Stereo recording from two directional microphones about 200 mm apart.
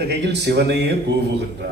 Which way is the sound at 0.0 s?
55° right (ahead or behind).